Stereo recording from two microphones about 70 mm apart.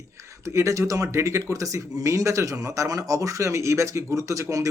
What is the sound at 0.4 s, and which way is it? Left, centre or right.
Speech, right.